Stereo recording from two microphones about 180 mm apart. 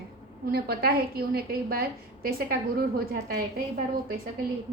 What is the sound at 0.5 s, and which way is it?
A woman's voice, 55° right (ahead or behind).